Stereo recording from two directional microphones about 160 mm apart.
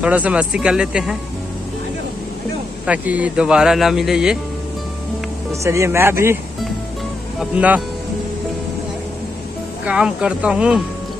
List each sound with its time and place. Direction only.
0.0 s speech: 10° right (ahead or behind)
2.9 s speech: 10° right (ahead or behind)
5.5 s speech: 20° right (ahead or behind)
7.3 s speech: 10° right (ahead or behind)
9.8 s speech: 5° right (ahead or behind)